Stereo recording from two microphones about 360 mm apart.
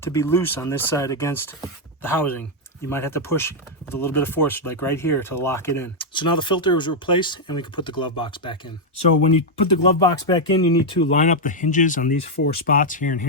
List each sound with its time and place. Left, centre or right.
0.0 s speech: centre
9.8 s speech: centre